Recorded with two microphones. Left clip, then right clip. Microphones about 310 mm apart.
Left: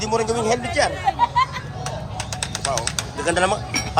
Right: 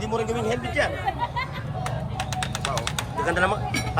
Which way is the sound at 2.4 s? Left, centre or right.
Right.